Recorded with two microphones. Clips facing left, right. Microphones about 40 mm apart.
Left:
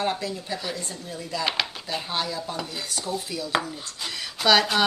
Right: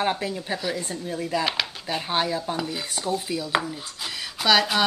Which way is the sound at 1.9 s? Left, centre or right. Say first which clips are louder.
Right 4 dB; centre.